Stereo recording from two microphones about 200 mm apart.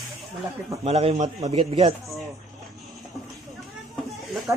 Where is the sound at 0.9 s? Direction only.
30° right (ahead or behind).